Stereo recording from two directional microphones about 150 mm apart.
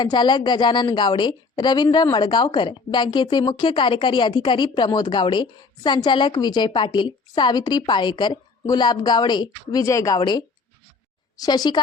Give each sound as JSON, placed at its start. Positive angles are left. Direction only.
{"t": 0.0, "sound": "a woman's voice", "side_deg": 30}